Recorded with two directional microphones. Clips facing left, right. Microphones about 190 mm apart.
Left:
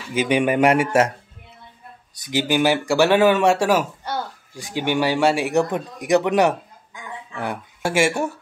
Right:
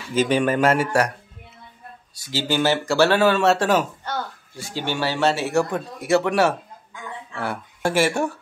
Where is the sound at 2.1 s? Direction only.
20° left (ahead or behind).